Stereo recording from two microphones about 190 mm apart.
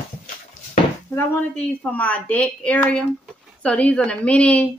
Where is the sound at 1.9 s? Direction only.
10° left (ahead or behind).